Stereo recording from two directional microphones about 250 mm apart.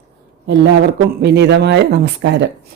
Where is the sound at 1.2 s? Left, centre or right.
Right.